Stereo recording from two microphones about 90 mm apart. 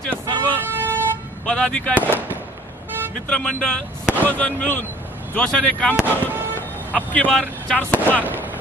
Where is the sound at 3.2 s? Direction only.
10° left (ahead or behind).